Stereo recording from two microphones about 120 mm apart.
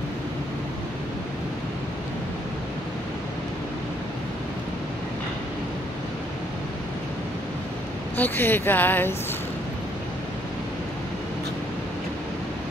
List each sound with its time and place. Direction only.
8.2 s speech: 15° left (ahead or behind)